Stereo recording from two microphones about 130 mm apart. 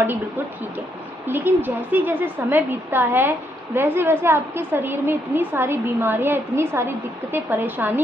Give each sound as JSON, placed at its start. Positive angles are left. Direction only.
{"t": 1.3, "sound": "a woman's voice", "side_deg": -15}